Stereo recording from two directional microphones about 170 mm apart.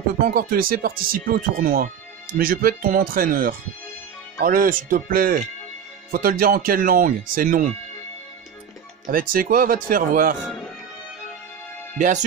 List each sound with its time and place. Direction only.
0.2 s speech: 60° right (ahead or behind)
9.0 s speech: 55° right (ahead or behind)
12.0 s speech: 45° right (ahead or behind)